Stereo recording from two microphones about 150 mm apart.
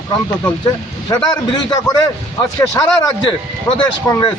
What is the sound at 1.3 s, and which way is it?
Speech, 30° left (ahead or behind).